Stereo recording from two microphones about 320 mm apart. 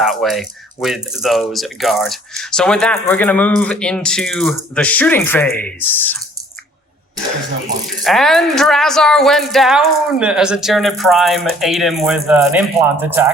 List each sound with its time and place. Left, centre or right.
0.0 s speech: centre
8.0 s speech: centre